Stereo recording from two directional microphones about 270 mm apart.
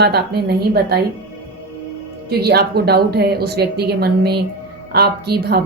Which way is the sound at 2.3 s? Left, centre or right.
Right.